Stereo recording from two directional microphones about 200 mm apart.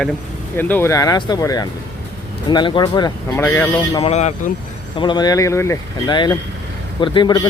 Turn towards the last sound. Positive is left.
turn(degrees=25)  # may be behind; listen again after turning